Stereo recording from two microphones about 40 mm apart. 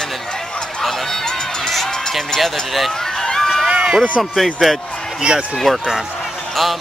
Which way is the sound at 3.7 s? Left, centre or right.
Right.